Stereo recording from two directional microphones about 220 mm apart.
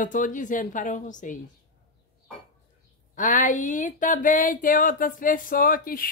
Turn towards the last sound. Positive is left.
turn(degrees=40)  # may be behind; listen again after turning